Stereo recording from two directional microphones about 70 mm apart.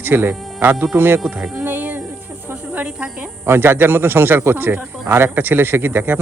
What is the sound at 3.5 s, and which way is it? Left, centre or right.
Speech, right.